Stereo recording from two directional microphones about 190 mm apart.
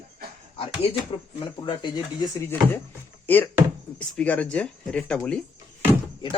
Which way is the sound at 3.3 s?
10° left (ahead or behind).